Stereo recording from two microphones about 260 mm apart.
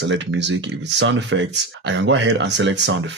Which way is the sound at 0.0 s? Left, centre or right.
Right.